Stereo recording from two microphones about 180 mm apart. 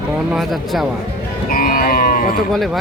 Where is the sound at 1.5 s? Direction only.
55° left (ahead or behind).